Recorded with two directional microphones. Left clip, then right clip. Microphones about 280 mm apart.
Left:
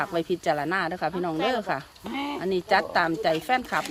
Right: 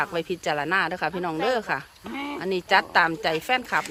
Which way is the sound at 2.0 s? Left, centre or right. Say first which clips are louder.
Left 1 dB; left.